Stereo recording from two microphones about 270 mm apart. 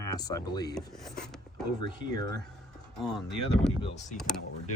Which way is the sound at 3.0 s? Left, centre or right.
Centre.